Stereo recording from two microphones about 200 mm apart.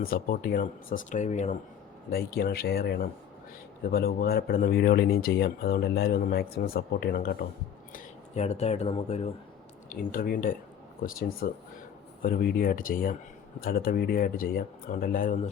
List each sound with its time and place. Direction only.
0.0 s a man's voice: 50° left (ahead or behind)
2.0 s a man's voice: 50° left (ahead or behind)
7.9 s speech: 35° left (ahead or behind)
9.9 s a man's voice: 45° left (ahead or behind)